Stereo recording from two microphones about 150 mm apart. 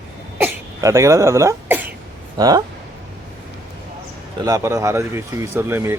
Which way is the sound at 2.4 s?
25° right (ahead or behind).